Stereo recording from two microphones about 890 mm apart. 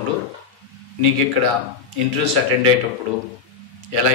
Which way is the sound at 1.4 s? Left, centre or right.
Right.